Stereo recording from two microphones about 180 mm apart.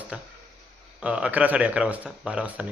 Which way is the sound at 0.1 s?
5° right (ahead or behind).